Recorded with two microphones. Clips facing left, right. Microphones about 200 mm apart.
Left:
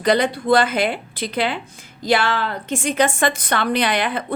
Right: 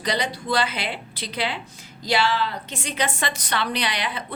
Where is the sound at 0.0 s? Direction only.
55° left (ahead or behind).